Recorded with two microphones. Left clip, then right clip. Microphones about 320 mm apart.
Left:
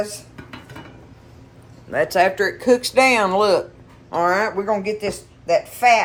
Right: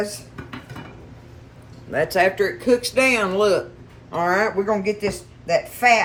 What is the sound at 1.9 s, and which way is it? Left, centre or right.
A woman's voice, centre.